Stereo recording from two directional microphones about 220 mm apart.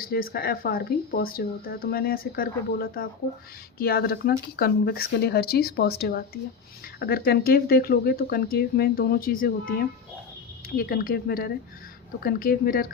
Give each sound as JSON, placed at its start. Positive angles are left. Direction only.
{"t": 0.0, "sound": "speech", "side_deg": 40}
{"t": 10.8, "sound": "a woman's voice", "side_deg": 40}